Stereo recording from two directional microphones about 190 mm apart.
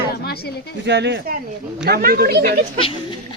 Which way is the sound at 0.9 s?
65° right (ahead or behind).